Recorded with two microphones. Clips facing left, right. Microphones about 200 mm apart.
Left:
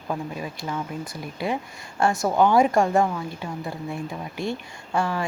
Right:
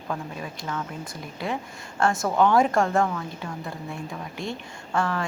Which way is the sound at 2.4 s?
5° left (ahead or behind).